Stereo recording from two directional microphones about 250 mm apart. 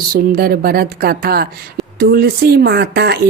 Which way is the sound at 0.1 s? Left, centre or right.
Right.